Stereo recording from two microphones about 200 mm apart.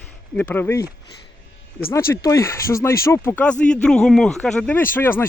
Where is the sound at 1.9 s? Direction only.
15° left (ahead or behind).